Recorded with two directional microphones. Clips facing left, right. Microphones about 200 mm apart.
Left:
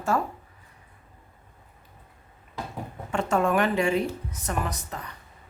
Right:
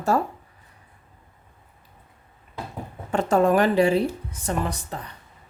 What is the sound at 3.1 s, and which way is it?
Speech, 35° right (ahead or behind).